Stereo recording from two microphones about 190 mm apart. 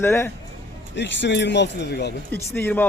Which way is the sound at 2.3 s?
10° left (ahead or behind).